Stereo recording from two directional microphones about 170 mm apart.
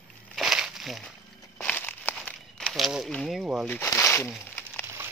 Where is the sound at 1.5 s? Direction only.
10° left (ahead or behind).